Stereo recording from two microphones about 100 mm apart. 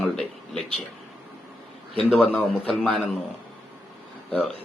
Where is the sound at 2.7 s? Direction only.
Centre (ahead or behind).